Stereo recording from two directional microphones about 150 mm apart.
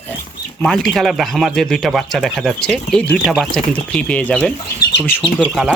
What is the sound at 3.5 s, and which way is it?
Speech, 10° left (ahead or behind).